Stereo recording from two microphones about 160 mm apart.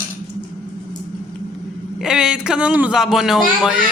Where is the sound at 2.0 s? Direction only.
5° right (ahead or behind).